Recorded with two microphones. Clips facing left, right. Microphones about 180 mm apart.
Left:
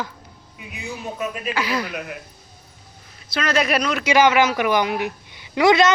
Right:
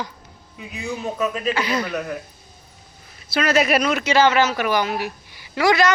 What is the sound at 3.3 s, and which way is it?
Speech, 5° right (ahead or behind).